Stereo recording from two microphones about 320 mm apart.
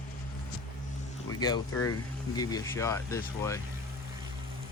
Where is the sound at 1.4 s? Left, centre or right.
Centre.